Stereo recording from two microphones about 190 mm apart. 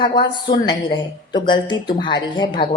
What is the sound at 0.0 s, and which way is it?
A woman's voice, 25° left (ahead or behind).